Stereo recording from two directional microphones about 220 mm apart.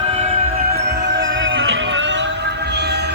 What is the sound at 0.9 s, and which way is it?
Music, 50° right (ahead or behind).